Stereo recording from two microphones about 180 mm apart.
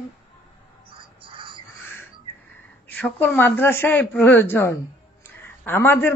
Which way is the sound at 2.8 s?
10° left (ahead or behind).